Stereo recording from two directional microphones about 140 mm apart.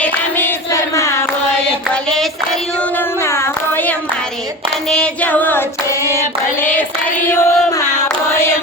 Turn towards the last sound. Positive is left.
turn(degrees=15)  # may be behind; listen again after turning